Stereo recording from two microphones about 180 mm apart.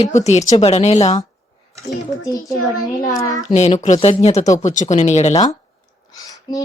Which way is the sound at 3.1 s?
20° left (ahead or behind).